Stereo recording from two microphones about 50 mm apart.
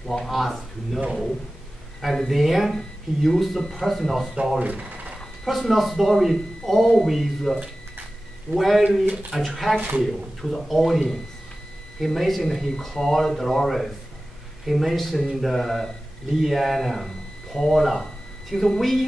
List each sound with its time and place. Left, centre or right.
0.1 s speech: centre
4.6 s a sound: right
5.4 s speech: centre